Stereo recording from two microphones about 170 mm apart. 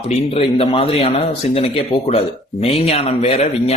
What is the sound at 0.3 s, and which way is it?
A man's voice, 35° left (ahead or behind).